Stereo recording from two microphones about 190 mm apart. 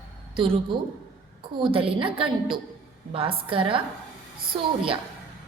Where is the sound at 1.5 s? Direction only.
25° right (ahead or behind).